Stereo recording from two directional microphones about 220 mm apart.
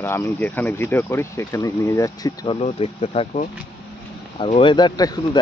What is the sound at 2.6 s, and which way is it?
Speech, 25° left (ahead or behind).